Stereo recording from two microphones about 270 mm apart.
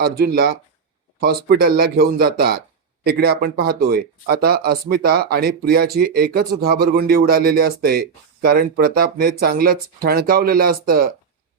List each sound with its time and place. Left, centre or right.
0.0 s speech: right